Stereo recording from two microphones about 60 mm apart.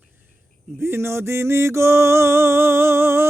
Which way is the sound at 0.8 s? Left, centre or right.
Right.